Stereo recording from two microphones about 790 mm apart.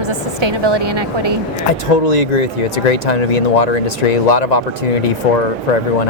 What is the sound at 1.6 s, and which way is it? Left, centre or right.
Speech, left.